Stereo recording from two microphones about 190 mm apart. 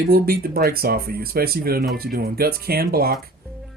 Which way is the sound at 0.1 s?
50° right (ahead or behind).